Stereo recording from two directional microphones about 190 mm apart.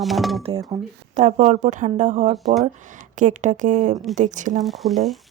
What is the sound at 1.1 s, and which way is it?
A woman's voice, 35° right (ahead or behind).